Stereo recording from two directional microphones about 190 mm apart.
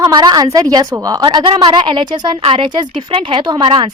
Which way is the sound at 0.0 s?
20° right (ahead or behind).